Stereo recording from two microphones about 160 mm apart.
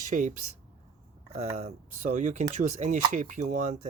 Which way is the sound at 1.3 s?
40° right (ahead or behind).